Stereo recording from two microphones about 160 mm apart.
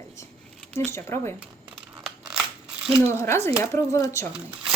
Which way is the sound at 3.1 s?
15° left (ahead or behind).